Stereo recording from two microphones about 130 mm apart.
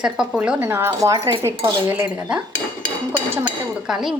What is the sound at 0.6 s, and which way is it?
Speech, 20° right (ahead or behind).